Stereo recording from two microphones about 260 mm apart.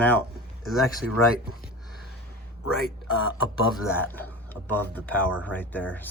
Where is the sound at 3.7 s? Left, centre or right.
Centre.